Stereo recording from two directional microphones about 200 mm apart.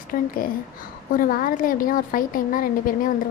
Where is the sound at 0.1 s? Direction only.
45° left (ahead or behind).